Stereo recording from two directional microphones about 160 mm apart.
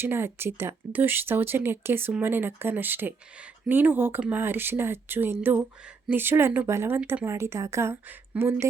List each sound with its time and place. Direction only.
0.0 s speech: 15° right (ahead or behind)